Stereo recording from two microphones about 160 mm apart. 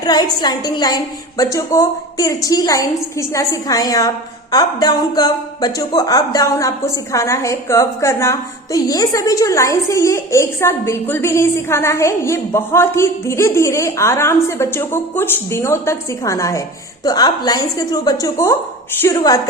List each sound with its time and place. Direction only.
0.0 s a woman's voice: 25° left (ahead or behind)